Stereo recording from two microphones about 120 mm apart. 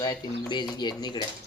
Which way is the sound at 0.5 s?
40° left (ahead or behind).